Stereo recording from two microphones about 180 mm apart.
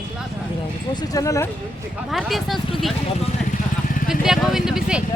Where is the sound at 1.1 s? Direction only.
20° left (ahead or behind).